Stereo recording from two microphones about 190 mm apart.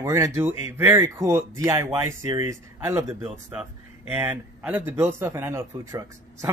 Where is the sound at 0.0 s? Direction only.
15° right (ahead or behind).